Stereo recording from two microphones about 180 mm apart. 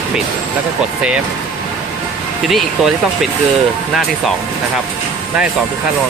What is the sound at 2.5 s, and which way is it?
Speech, centre (ahead or behind).